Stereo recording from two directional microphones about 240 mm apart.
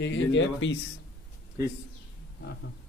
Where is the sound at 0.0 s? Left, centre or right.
Left.